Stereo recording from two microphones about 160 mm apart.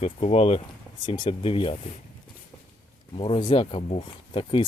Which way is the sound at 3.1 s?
35° left (ahead or behind).